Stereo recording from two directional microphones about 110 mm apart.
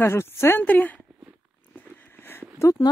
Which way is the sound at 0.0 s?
20° left (ahead or behind).